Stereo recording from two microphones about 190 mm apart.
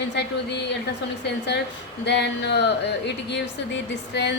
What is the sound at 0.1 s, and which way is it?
Speech, 65° left (ahead or behind).